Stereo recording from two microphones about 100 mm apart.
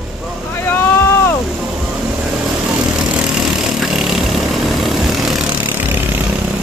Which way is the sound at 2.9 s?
10° right (ahead or behind).